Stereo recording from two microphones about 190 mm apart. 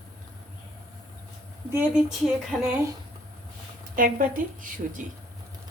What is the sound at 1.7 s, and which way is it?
Speech, 5° right (ahead or behind).